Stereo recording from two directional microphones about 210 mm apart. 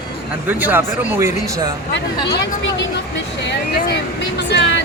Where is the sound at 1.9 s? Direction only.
60° left (ahead or behind).